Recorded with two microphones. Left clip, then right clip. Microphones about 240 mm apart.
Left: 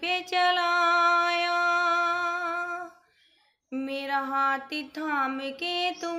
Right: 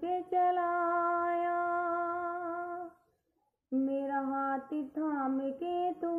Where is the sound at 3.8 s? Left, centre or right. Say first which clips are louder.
Left 6 dB; left.